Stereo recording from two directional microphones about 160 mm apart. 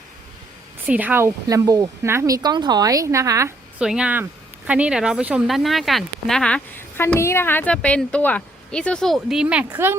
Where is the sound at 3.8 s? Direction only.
5° right (ahead or behind).